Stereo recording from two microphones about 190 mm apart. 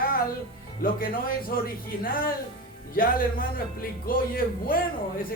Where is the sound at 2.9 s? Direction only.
50° left (ahead or behind).